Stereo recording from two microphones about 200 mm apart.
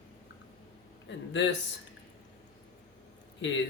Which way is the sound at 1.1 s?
65° left (ahead or behind).